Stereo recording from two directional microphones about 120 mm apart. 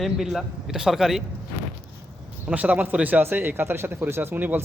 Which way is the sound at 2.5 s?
10° right (ahead or behind).